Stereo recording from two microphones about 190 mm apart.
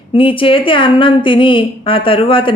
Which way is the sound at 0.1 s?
30° left (ahead or behind).